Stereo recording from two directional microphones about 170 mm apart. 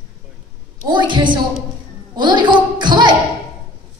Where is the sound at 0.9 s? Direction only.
30° right (ahead or behind).